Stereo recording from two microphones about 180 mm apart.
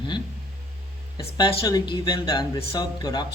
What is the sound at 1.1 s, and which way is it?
Speech, 20° left (ahead or behind).